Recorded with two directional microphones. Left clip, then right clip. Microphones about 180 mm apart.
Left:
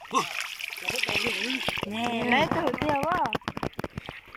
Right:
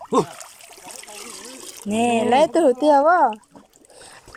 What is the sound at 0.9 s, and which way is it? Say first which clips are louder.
Water: left 13 dB; 30° right (ahead or behind).